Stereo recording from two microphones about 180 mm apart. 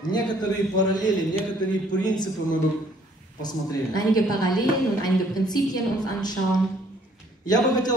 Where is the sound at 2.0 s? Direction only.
25° left (ahead or behind).